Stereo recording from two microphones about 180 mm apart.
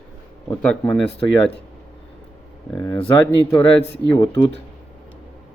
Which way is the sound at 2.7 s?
25° left (ahead or behind).